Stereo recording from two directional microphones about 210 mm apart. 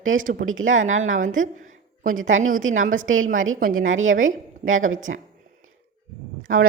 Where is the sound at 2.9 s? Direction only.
70° right (ahead or behind).